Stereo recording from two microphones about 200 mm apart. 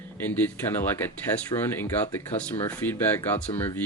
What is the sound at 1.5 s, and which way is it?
Speech, 10° left (ahead or behind).